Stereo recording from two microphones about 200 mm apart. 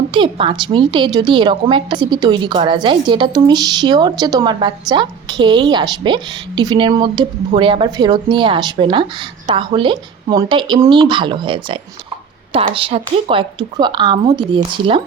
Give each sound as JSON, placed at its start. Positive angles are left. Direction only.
{"t": 0.1, "sound": "a woman's voice", "side_deg": -25}